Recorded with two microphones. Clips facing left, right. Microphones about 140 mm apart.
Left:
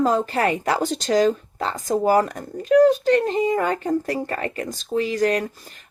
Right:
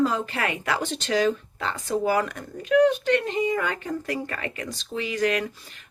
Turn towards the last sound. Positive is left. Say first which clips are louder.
# left 4 dB
turn(degrees=40)  # may be behind; listen again after turning